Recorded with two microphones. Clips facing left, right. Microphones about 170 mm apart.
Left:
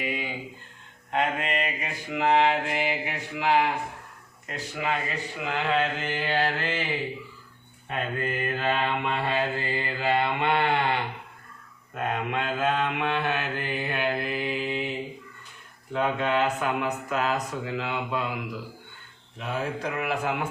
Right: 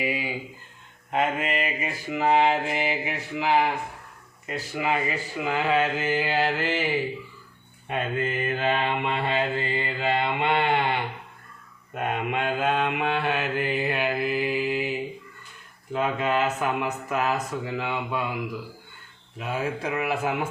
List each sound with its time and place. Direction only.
0.0 s a sound: 10° right (ahead or behind)
1.1 s mantra: 5° right (ahead or behind)
7.9 s mantra: 20° right (ahead or behind); by 18.3 s 5° right (ahead or behind)
19.4 s mantra: 10° right (ahead or behind)